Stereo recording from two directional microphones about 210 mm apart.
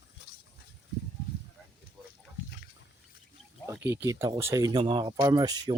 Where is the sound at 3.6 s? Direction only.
10° right (ahead or behind).